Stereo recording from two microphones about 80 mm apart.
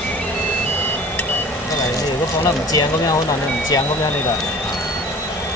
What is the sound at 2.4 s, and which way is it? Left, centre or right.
Speech, left.